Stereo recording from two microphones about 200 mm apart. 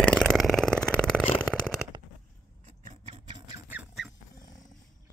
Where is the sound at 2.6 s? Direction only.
35° right (ahead or behind).